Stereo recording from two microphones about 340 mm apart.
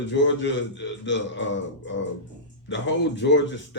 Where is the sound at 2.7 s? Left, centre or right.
Left.